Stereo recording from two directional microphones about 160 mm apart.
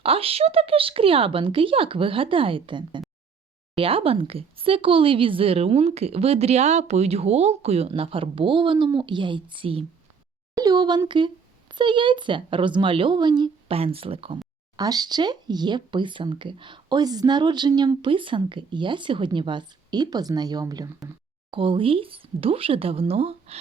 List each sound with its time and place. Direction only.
0.0 s a woman's voice: 35° right (ahead or behind)
10.5 s a woman's voice: 25° right (ahead or behind)
14.8 s a woman's voice: 25° right (ahead or behind); by 23.6 s 40° right (ahead or behind)